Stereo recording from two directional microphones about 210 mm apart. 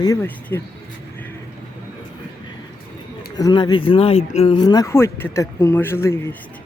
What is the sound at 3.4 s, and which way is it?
Speech, 20° left (ahead or behind).